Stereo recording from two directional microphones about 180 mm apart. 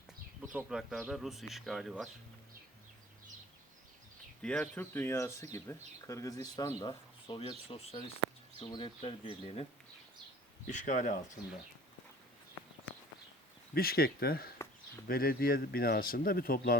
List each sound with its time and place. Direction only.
0.5 s speech: centre (ahead or behind)
4.4 s speech: 5° left (ahead or behind); by 9.6 s 30° left (ahead or behind)
10.7 s speech: 45° left (ahead or behind)
13.7 s speech: 55° left (ahead or behind)